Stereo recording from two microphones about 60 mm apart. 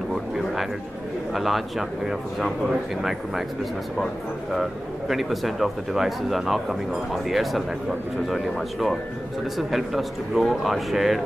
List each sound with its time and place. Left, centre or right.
1.3 s speech: centre
4.6 s speech: centre